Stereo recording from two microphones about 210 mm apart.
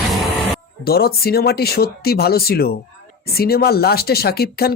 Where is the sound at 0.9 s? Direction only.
45° left (ahead or behind).